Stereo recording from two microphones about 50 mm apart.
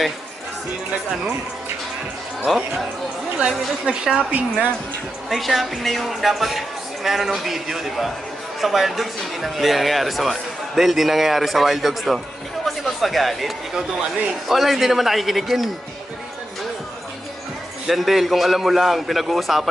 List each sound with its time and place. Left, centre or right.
2.4 s speech: centre
3.3 s a woman's voice: centre
5.3 s speech: centre
12.6 s music: centre
14.5 s speech: centre
17.8 s speech: centre